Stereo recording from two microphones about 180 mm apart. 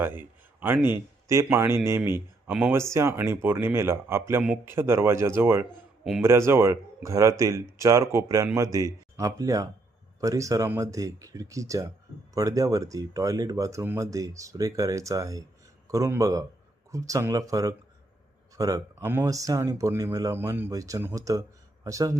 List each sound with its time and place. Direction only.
0.0 s speech: 10° right (ahead or behind)